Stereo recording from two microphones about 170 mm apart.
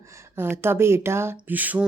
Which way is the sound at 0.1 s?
15° right (ahead or behind).